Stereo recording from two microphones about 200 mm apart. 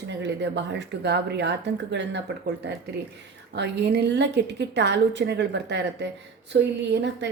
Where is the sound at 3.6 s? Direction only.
60° right (ahead or behind).